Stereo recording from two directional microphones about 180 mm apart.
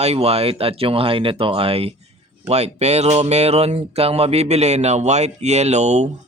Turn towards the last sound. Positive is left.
turn(degrees=-40)  # may be behind; listen again after turning